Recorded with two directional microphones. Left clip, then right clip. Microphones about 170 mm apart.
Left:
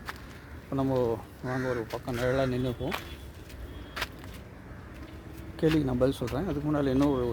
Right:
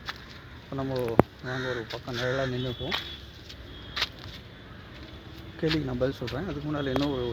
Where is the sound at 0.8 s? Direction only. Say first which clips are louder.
Right 3 dB; 30° left (ahead or behind).